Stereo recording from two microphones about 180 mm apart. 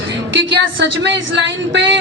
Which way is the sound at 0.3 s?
85° right.